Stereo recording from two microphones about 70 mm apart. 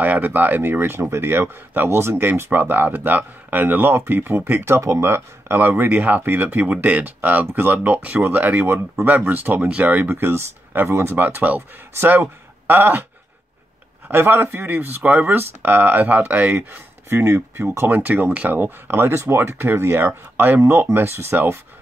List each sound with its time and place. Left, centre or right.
0.0 s speech: right
10.0 s speech: right
14.1 s speech: right
17.1 s speech: right
17.9 s speech: right